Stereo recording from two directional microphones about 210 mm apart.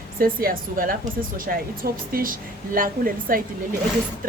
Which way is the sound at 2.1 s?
40° right (ahead or behind).